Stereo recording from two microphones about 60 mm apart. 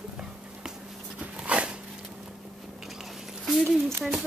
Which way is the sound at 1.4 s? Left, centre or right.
Right.